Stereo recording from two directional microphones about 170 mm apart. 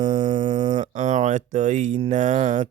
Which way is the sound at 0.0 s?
45° right (ahead or behind).